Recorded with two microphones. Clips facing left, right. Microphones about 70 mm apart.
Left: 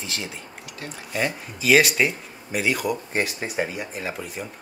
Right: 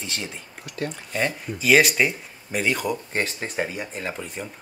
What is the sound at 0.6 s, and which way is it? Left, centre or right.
Speech, right.